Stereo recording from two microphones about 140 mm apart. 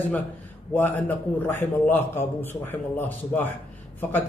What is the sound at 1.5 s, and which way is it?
A man's voice, 15° left (ahead or behind).